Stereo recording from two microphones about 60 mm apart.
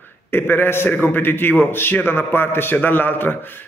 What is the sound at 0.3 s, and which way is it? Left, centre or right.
A man's voice, left.